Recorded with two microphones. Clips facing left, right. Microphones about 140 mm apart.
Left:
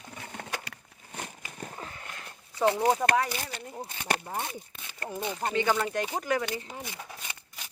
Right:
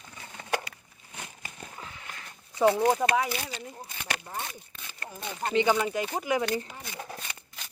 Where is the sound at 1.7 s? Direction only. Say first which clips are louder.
Left 2 dB; 45° left (ahead or behind).